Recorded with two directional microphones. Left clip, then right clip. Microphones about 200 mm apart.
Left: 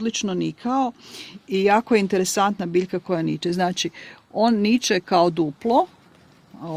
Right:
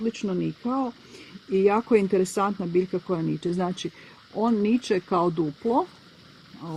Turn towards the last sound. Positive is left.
turn(degrees=40)  # may be behind; listen again after turning